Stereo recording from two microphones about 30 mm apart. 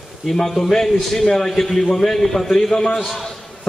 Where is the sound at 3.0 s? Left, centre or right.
Centre.